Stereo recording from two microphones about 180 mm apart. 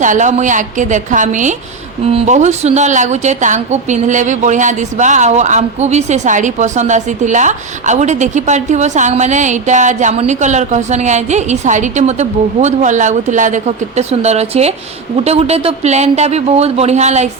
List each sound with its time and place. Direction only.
0.0 s a woman's voice: 45° right (ahead or behind)